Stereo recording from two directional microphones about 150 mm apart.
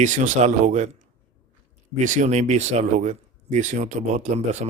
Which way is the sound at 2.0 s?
55° right (ahead or behind).